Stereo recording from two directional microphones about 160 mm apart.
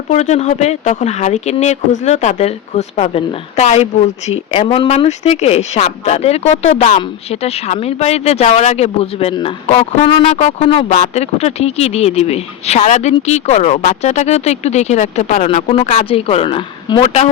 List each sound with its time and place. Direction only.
0.1 s speech: 45° left (ahead or behind)